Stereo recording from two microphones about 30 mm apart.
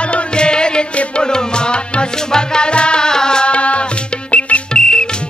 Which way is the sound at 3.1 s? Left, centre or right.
Left.